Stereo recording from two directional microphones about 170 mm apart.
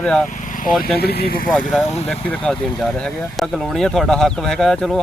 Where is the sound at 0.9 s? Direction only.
65° left (ahead or behind).